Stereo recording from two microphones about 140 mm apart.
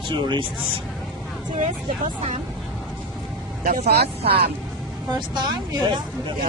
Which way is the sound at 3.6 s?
90° right.